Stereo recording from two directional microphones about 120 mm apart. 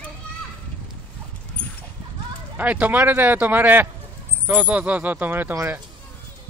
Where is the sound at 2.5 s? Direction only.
15° right (ahead or behind).